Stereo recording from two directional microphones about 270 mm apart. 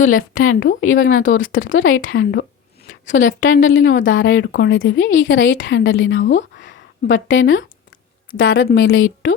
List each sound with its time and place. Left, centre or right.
0.2 s a woman's voice: left